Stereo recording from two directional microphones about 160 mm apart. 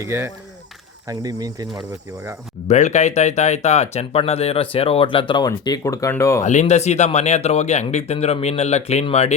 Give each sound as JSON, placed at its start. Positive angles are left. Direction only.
{"t": 0.0, "sound": "speech", "side_deg": -15}
{"t": 2.6, "sound": "speech", "side_deg": 45}
{"t": 6.4, "sound": "speech", "side_deg": 45}